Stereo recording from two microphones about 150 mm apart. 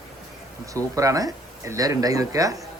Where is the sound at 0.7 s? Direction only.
20° right (ahead or behind).